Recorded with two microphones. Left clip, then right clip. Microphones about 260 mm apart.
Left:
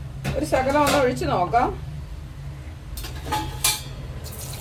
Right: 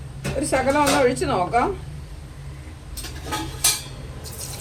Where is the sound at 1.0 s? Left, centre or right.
Right.